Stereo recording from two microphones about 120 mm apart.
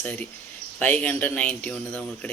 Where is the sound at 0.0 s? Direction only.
10° left (ahead or behind).